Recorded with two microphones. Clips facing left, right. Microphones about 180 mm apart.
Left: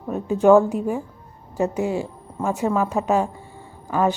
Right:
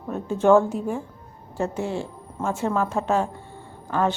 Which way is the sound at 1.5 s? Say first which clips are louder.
Left 4 dB; 15° left (ahead or behind).